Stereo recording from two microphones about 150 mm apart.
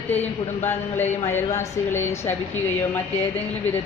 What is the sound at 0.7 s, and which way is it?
A woman's voice, 15° left (ahead or behind).